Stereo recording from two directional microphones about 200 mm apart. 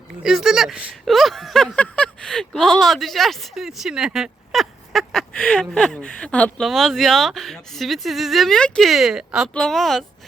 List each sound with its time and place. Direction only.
0.2 s speech: centre (ahead or behind)